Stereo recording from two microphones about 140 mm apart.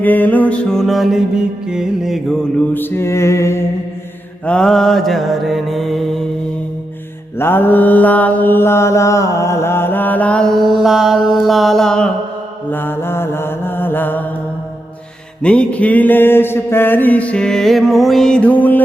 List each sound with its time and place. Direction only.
0.0 s music: 10° left (ahead or behind); by 2.2 s 5° right (ahead or behind)
2.7 s music: 15° left (ahead or behind)
4.4 s music: 5° left (ahead or behind)
7.3 s music: 15° left (ahead or behind)
12.7 s mantra: 15° left (ahead or behind)
15.4 s music: 10° left (ahead or behind)